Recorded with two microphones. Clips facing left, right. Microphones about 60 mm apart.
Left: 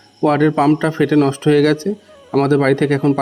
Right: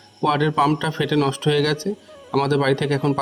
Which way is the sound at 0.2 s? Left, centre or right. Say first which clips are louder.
Left 5 dB; left.